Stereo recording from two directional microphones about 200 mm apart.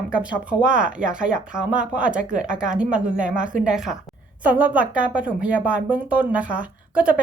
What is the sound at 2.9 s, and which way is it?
Speech, 40° right (ahead or behind).